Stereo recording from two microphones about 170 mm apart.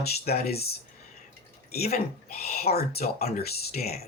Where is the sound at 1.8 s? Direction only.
40° left (ahead or behind).